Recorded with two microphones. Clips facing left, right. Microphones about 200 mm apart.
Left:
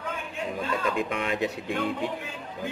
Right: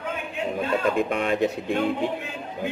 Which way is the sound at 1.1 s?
40° right (ahead or behind).